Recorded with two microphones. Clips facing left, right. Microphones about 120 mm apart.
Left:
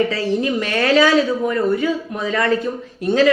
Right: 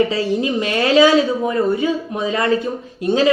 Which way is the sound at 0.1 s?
20° right (ahead or behind).